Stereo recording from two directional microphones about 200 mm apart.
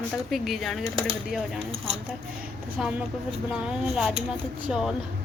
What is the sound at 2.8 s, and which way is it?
Speech, 5° right (ahead or behind).